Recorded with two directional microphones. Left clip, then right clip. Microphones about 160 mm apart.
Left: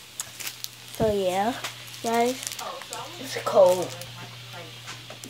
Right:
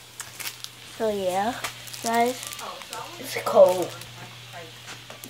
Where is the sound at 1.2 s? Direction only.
20° left (ahead or behind).